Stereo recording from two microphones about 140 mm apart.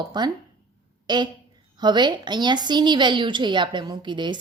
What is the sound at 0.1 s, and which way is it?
A woman's voice, 30° right (ahead or behind).